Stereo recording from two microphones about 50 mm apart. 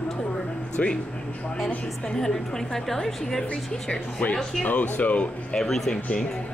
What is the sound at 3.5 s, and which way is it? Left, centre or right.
Speech, left.